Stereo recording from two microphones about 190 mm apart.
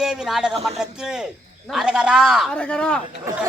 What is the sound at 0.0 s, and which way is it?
A man's voice, centre (ahead or behind).